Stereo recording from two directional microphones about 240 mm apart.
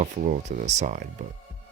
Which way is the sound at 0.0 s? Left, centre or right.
Right.